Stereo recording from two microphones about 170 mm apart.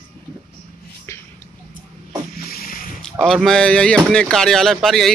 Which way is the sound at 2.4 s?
60° left (ahead or behind).